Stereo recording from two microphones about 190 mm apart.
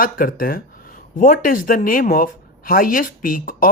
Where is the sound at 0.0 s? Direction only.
50° left (ahead or behind).